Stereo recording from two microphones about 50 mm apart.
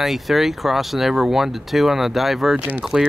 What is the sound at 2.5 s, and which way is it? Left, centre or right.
Speech, right.